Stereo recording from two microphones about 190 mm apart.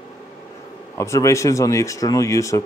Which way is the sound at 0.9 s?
15° left (ahead or behind).